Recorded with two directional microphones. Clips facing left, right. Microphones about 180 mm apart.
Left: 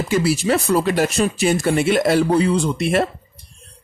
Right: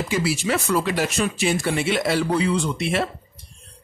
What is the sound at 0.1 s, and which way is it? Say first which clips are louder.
A man's voice: left 6 dB; 40° left (ahead or behind).